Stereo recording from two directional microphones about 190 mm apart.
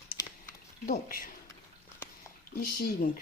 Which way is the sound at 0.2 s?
20° left (ahead or behind).